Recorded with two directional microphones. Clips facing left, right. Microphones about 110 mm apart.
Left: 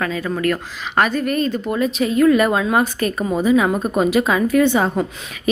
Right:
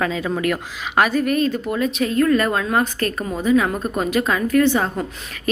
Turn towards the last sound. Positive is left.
turn(degrees=10)  # may be behind; listen again after turning